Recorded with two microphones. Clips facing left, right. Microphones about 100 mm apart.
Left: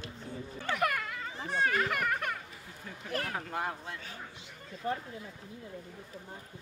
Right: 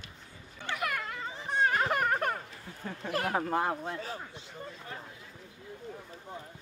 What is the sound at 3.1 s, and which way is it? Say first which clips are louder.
Speech: right 6 dB; 40° right (ahead or behind).